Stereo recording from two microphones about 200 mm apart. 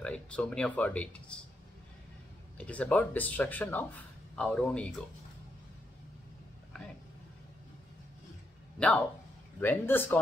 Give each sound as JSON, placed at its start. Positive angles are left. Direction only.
{"t": 0.0, "sound": "speech", "side_deg": 5}
{"t": 2.5, "sound": "speech", "side_deg": 5}
{"t": 8.7, "sound": "speech", "side_deg": 5}